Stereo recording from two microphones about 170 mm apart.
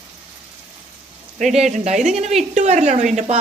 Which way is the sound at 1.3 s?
45° right (ahead or behind).